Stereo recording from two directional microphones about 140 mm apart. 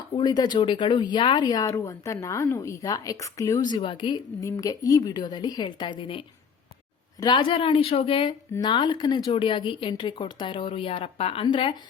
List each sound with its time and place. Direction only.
0.2 s speech: 30° left (ahead or behind)
4.4 s speech: 25° left (ahead or behind); by 11.4 s 45° left (ahead or behind)
11.4 s speech: 35° left (ahead or behind)